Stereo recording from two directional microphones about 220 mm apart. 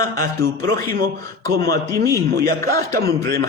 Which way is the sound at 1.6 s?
45° right (ahead or behind).